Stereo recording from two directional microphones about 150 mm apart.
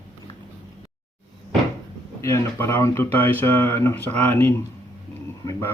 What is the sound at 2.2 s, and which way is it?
Speech, 20° left (ahead or behind).